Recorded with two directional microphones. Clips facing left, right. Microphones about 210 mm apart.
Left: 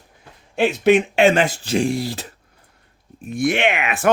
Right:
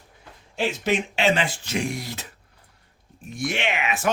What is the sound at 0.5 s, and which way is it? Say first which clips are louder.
Speech: left 9 dB; 60° left (ahead or behind).